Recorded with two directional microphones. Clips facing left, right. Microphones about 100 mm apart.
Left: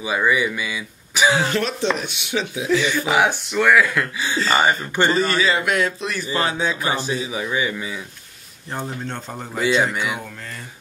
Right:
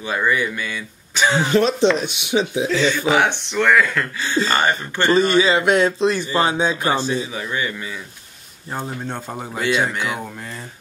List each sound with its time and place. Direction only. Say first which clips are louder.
0.0 s speech: left 1 dB; 10° left (ahead or behind)
1.4 s a man's voice: right 6 dB; 20° right (ahead or behind)
2.7 s speech: left 1 dB; 15° left (ahead or behind)
5.1 s a man's voice: right 4 dB; 20° right (ahead or behind)
7.1 s speech: right 1 dB; 15° left (ahead or behind)
8.7 s speech: right 1 dB; 10° right (ahead or behind)